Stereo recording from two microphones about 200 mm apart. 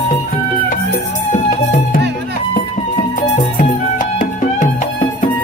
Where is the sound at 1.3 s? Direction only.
45° left (ahead or behind).